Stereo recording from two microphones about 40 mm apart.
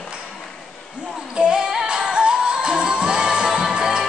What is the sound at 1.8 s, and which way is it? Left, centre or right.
Music, right.